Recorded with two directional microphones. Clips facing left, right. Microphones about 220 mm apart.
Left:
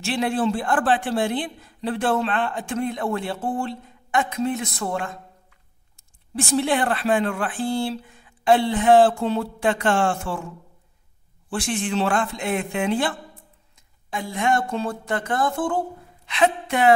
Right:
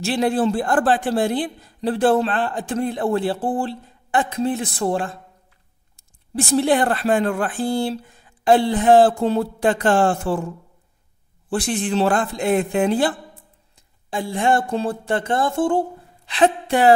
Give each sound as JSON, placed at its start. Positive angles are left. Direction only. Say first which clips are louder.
{"t": 0.0, "sound": "a man's voice", "louder": "right 3 dB", "side_deg": -40}
{"t": 11.5, "sound": "a man's voice", "louder": "right 3 dB", "side_deg": -35}